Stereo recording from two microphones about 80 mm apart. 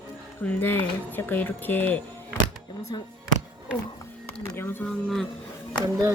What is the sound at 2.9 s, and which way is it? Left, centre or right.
Speech, left.